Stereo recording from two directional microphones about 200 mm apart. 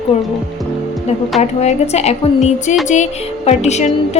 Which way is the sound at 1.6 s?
35° left (ahead or behind).